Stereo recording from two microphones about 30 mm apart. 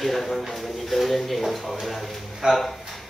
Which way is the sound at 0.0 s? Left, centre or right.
Centre.